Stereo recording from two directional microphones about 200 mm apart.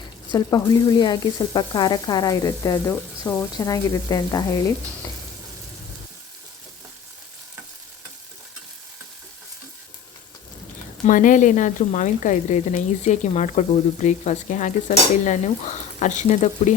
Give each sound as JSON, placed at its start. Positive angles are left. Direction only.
{"t": 0.3, "sound": "sizzle", "side_deg": 20}
{"t": 11.0, "sound": "speech", "side_deg": 40}